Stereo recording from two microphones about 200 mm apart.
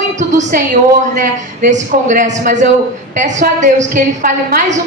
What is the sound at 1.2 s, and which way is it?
A woman's voice, 40° right (ahead or behind).